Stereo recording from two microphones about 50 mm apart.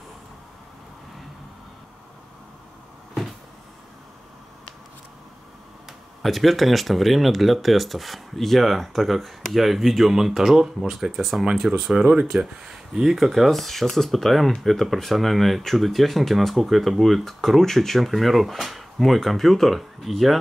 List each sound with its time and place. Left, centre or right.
5.9 s speech: centre
12.2 s speech: right
12.6 s speech: centre